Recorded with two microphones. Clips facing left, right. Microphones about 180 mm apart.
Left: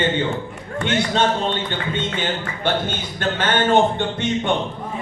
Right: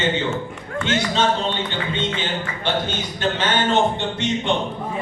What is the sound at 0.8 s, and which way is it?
A man's voice, 55° left (ahead or behind).